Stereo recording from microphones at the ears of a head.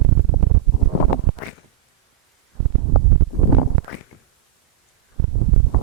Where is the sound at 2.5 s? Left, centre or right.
Right.